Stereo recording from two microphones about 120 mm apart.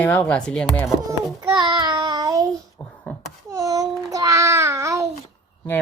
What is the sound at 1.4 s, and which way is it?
Child singing, 35° right (ahead or behind).